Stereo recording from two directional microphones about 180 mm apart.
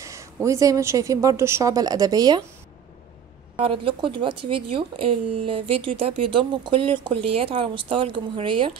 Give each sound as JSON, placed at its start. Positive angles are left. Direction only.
{"t": 0.0, "sound": "speech", "side_deg": -15}
{"t": 3.5, "sound": "speech", "side_deg": -30}